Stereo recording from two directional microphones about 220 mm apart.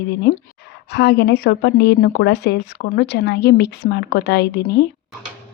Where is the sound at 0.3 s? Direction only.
45° left (ahead or behind).